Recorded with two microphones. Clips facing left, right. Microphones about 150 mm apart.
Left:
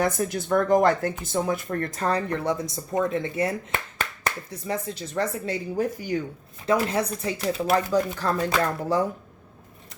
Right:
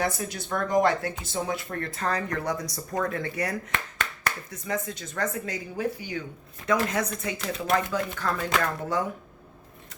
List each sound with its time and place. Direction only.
0.0 s speech: 50° left (ahead or behind)
1.7 s speech: 35° left (ahead or behind)
4.5 s speech: 30° left (ahead or behind)
6.7 s speech: 30° left (ahead or behind)